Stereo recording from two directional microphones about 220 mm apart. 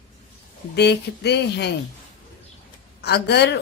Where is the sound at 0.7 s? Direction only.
50° left (ahead or behind).